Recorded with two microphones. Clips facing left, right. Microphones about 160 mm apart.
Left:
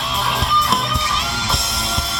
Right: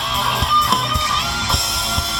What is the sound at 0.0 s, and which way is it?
Music, centre (ahead or behind).